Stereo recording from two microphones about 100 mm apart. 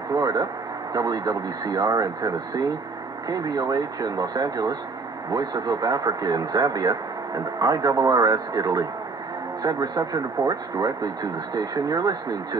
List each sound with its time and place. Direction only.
0.1 s speech: 40° right (ahead or behind)